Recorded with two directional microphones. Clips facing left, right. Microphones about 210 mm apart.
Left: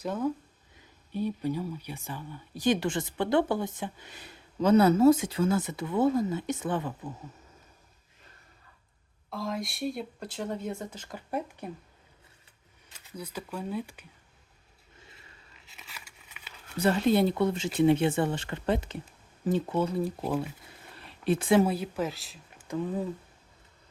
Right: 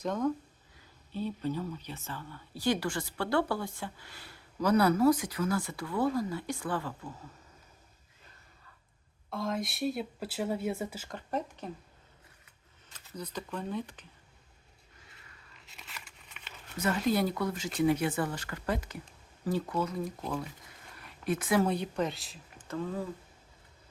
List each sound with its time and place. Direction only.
0.0 s speech: 5° left (ahead or behind)
9.3 s speech: centre (ahead or behind)
11.1 s speech: 10° left (ahead or behind)
12.9 s speech: 10° left (ahead or behind)
15.6 s a sound: centre (ahead or behind)
16.7 s speech: 30° left (ahead or behind)
20.9 s a sound: 30° left (ahead or behind)
21.7 s speech: 5° left (ahead or behind)
22.6 s speech: 15° left (ahead or behind)